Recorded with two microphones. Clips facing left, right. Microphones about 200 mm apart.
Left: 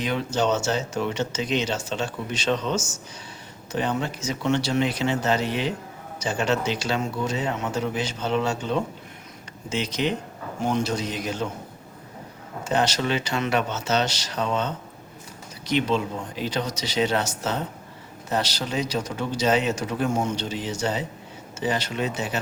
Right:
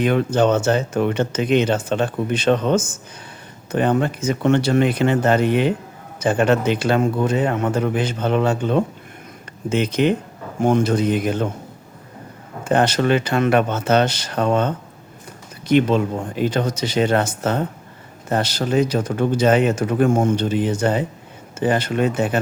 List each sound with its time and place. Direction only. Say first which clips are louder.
0.0 s speech: right 7 dB; 55° right (ahead or behind)
12.6 s speech: right 7 dB; 55° right (ahead or behind)